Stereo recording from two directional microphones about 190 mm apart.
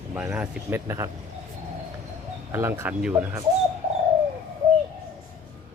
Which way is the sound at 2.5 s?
15° right (ahead or behind).